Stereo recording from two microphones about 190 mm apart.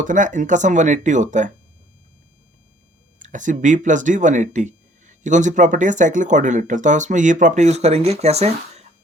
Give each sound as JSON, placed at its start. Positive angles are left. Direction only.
{"t": 0.0, "sound": "speech", "side_deg": -40}
{"t": 3.2, "sound": "speech", "side_deg": -40}